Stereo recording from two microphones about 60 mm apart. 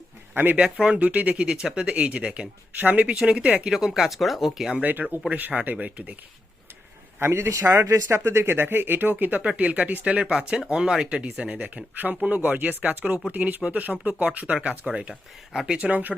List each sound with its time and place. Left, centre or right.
0.3 s speech: right
0.6 s speech: centre
0.9 s speech: right
3.2 s speech: centre
4.8 s speech: right
7.2 s a man's voice: right